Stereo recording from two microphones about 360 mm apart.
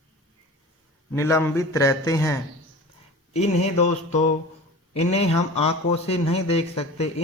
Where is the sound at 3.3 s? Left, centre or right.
Centre.